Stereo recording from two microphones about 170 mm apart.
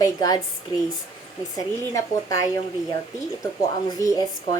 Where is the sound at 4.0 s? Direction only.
20° left (ahead or behind).